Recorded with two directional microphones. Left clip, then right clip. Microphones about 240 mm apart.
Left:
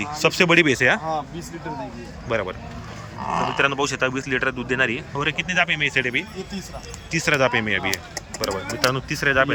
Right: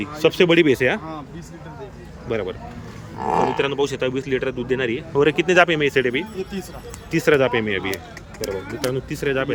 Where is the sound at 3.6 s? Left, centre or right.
Centre.